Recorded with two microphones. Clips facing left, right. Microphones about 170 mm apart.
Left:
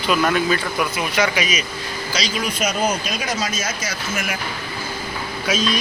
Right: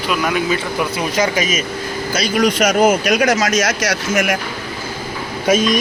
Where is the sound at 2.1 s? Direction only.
60° right (ahead or behind).